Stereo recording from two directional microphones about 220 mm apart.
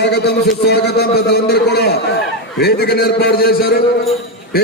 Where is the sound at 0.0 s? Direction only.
50° left (ahead or behind).